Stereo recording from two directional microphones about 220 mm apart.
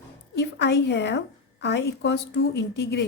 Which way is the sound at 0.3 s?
50° left (ahead or behind).